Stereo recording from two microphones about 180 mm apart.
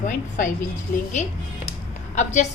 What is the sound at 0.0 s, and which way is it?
Speech, 45° left (ahead or behind).